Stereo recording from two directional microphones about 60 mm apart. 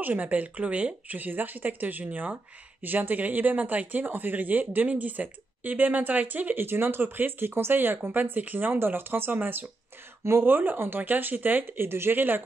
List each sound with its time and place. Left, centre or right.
0.0 s speech: right